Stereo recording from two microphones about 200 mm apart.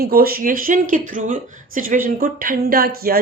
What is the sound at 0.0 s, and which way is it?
A woman's voice, 50° right (ahead or behind).